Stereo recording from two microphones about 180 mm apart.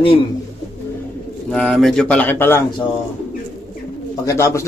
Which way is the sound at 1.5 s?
5° left (ahead or behind).